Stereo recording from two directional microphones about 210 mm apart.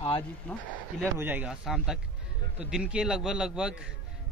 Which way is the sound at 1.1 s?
10° right (ahead or behind).